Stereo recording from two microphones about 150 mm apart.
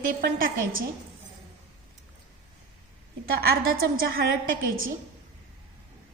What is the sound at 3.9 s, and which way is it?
Speech, 80° right.